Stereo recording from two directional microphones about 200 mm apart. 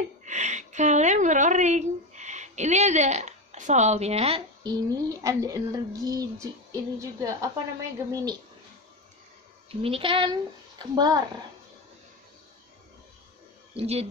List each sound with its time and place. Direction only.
0.2 s a sound: 35° right (ahead or behind)
4.6 s speech: 20° right (ahead or behind)
9.7 s speech: 30° right (ahead or behind)
13.7 s speech: 30° right (ahead or behind)